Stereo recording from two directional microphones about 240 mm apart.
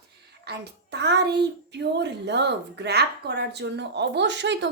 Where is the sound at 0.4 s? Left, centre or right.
Right.